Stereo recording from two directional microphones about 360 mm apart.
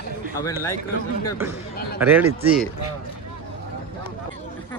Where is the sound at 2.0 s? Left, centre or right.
Centre.